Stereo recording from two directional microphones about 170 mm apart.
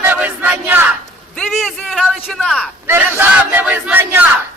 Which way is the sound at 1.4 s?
Centre (ahead or behind).